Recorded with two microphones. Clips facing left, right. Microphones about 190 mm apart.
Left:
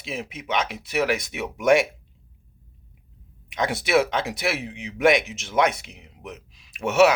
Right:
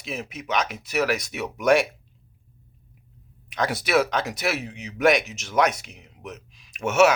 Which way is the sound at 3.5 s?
25° left (ahead or behind).